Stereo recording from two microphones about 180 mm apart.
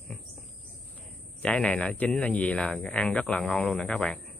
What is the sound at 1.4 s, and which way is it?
Speech, 5° left (ahead or behind).